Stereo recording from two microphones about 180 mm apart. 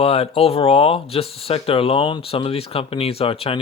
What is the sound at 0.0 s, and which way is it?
Speech, 35° left (ahead or behind).